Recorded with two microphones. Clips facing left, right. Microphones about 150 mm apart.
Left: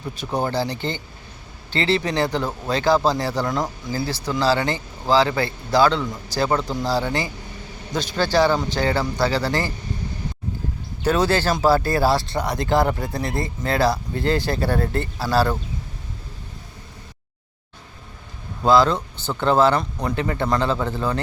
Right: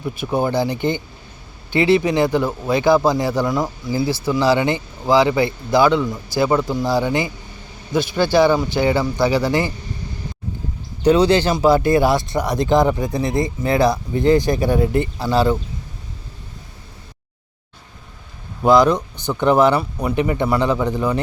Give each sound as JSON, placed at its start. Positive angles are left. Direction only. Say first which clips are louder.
{"t": 0.2, "sound": "speech", "louder": "right 4 dB", "side_deg": -10}
{"t": 3.4, "sound": "speech", "louder": "right 4 dB", "side_deg": -5}
{"t": 3.9, "sound": "speech", "louder": "right 6 dB", "side_deg": -15}
{"t": 11.0, "sound": "speech", "louder": "right 5 dB", "side_deg": -15}
{"t": 18.6, "sound": "speech", "louder": "right 3 dB", "side_deg": -15}